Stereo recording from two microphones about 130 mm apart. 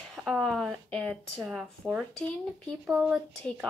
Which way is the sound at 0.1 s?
Centre (ahead or behind).